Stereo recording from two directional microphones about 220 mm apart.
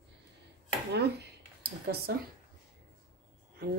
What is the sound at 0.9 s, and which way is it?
Speech, 50° right (ahead or behind).